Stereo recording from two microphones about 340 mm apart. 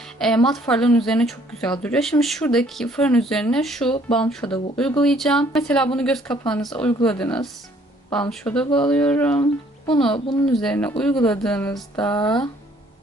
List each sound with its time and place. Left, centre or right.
0.2 s speech: centre
10.5 s speech: centre